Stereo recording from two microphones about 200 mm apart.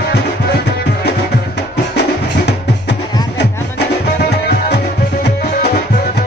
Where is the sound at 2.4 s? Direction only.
55° left (ahead or behind).